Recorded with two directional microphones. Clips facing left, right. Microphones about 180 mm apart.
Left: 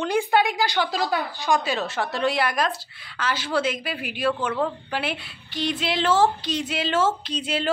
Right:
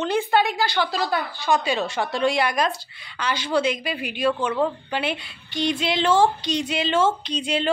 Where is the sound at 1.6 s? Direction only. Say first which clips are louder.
Right 2 dB; centre (ahead or behind).